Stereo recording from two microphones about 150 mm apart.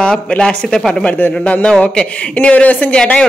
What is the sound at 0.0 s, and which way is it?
Speech, 5° left (ahead or behind).